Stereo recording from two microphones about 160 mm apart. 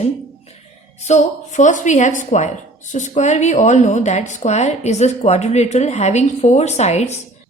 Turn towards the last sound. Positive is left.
turn(degrees=45)  # may be behind; listen again after turning